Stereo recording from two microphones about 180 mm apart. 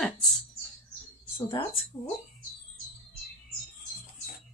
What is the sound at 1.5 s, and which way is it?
Speech, 30° left (ahead or behind).